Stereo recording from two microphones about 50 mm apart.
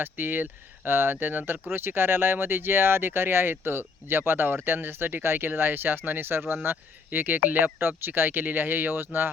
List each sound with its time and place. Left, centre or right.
0.0 s speech: right